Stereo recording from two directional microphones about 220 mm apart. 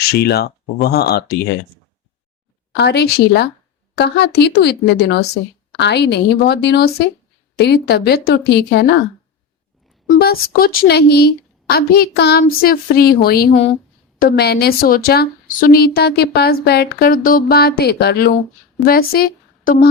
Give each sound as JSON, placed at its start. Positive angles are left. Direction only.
{"t": 0.1, "sound": "a woman's voice", "side_deg": 45}
{"t": 2.7, "sound": "a woman's voice", "side_deg": 50}
{"t": 10.2, "sound": "a woman's voice", "side_deg": 45}